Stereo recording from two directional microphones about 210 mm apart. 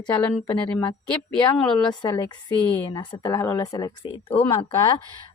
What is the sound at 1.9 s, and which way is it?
Speech, 20° left (ahead or behind).